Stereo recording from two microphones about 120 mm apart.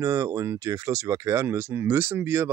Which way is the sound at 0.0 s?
25° right (ahead or behind).